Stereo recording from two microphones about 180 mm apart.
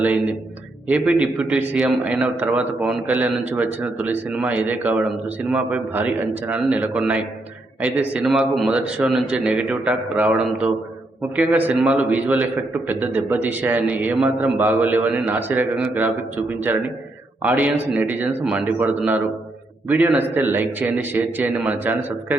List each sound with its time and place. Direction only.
0.0 s a man's voice: 10° right (ahead or behind)